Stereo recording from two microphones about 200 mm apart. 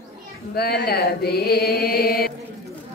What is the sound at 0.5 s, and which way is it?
Mantra, 55° left (ahead or behind).